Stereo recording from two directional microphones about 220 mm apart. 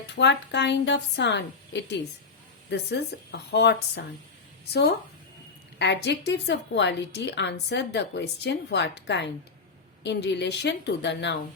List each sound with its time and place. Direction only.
0.1 s a woman's voice: 55° left (ahead or behind)